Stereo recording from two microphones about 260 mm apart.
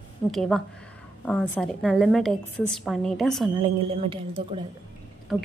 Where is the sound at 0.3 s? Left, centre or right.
Centre.